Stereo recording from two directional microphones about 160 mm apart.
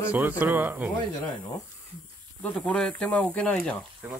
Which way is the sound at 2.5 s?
5° left (ahead or behind).